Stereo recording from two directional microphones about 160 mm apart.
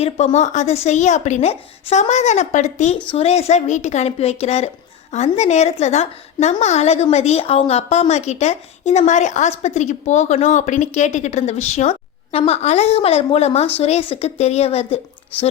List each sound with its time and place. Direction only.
0.3 s a woman's voice: 45° left (ahead or behind)